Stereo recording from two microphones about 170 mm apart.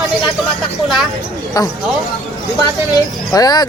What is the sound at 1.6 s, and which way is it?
Speech, 20° left (ahead or behind).